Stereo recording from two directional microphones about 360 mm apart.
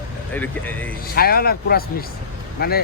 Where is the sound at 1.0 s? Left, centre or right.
Left.